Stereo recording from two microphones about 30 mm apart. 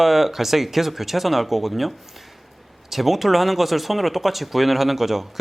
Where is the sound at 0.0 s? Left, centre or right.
Centre.